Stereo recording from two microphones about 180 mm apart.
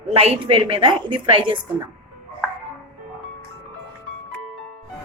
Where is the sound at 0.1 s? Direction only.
35° right (ahead or behind).